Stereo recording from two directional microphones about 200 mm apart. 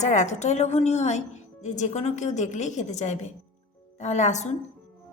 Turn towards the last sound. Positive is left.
turn(degrees=35)  # may be behind; listen again after turning